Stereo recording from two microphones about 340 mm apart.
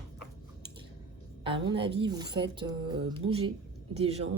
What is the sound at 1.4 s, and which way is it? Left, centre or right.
A woman's voice, centre.